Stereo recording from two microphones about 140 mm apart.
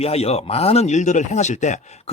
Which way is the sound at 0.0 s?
45° left (ahead or behind).